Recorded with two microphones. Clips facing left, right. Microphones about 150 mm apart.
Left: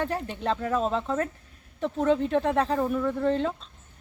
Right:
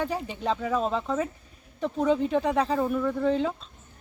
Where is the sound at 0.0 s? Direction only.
5° right (ahead or behind).